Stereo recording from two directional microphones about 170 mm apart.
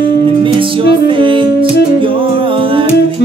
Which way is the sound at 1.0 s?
30° right (ahead or behind).